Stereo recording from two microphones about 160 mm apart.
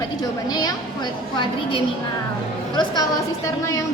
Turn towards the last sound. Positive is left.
turn(degrees=25)  # may be behind; listen again after turning